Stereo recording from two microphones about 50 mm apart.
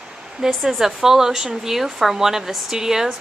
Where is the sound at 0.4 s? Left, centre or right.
Centre.